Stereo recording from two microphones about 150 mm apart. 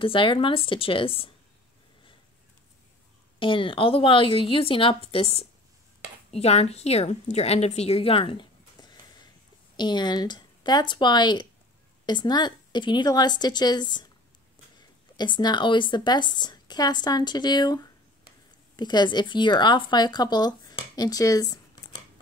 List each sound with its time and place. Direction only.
0.0 s speech: 35° left (ahead or behind)
3.3 s a woman's voice: 35° left (ahead or behind)
18.8 s speech: 30° left (ahead or behind)